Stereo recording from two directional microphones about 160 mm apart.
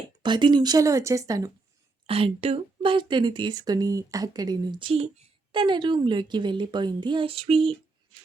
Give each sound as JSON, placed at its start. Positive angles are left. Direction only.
{"t": 0.2, "sound": "speech", "side_deg": -30}
{"t": 2.0, "sound": "speech", "side_deg": -35}